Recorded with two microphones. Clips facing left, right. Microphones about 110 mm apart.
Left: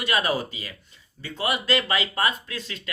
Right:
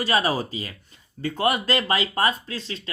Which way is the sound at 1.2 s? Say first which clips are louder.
Right 5 dB; 50° right (ahead or behind).